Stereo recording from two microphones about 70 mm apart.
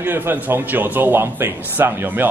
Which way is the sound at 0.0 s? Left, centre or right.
Right.